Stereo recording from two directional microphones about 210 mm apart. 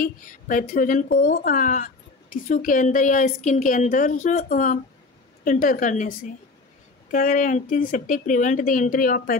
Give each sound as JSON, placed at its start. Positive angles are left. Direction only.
{"t": 0.0, "sound": "a woman's voice", "side_deg": 40}